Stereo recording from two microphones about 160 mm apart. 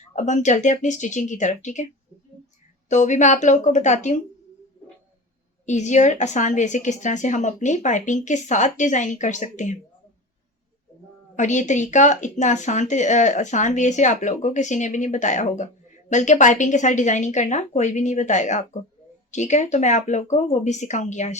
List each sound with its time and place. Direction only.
0.2 s speech: 50° left (ahead or behind)
2.9 s speech: 50° left (ahead or behind)
5.6 s speech: 45° left (ahead or behind)
11.3 s speech: 50° left (ahead or behind)